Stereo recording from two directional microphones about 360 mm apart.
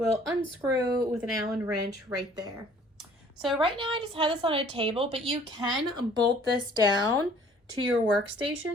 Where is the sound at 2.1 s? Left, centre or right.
Centre.